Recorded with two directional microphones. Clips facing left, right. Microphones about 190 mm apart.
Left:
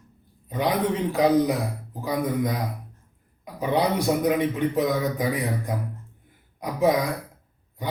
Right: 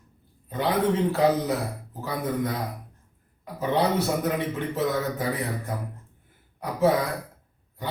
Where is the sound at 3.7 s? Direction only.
15° left (ahead or behind).